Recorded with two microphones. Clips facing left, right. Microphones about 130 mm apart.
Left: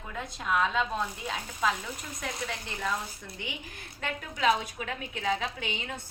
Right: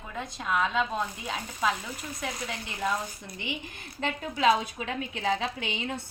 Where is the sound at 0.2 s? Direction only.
Centre (ahead or behind).